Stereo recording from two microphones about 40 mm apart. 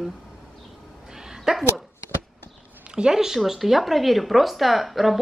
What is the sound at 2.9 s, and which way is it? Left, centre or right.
Speech, right.